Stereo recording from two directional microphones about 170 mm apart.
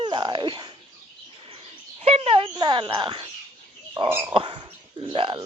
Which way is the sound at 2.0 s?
35° right (ahead or behind).